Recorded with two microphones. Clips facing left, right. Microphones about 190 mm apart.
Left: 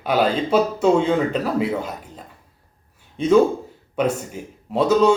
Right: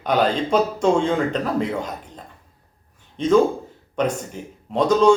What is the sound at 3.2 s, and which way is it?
A man's voice, 10° left (ahead or behind).